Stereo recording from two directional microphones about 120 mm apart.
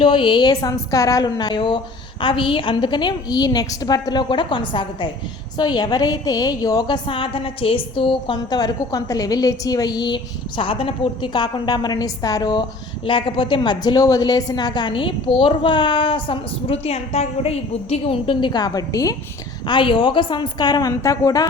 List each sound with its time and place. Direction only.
0.0 s a woman's voice: 45° left (ahead or behind)
0.5 s a woman's voice: 30° left (ahead or behind)
10.6 s a woman's voice: 50° left (ahead or behind)
13.1 s a woman's voice: 50° left (ahead or behind); by 19.1 s 30° left (ahead or behind)
19.6 s a woman's voice: 40° left (ahead or behind)